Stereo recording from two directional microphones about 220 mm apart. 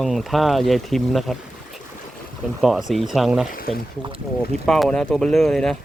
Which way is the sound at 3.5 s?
40° left (ahead or behind).